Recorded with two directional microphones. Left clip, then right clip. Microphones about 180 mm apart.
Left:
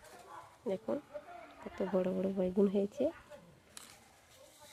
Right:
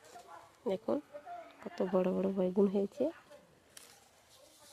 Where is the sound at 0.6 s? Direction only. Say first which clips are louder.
Right 3 dB; 45° right (ahead or behind).